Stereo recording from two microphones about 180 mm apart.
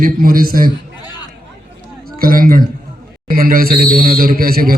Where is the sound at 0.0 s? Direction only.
55° right (ahead or behind).